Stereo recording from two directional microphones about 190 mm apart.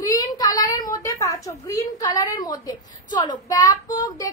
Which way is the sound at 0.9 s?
15° left (ahead or behind).